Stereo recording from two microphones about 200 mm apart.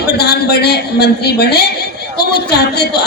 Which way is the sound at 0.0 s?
55° left (ahead or behind).